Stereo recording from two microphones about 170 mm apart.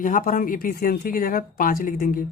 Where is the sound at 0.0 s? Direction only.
50° left (ahead or behind).